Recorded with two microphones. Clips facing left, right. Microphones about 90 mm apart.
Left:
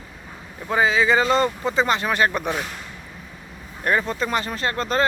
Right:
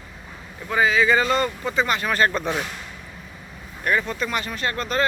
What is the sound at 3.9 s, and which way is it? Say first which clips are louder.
Speech: left 2 dB; 30° left (ahead or behind).